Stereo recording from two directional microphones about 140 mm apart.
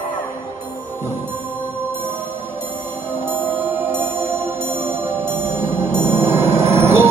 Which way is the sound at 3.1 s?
15° right (ahead or behind).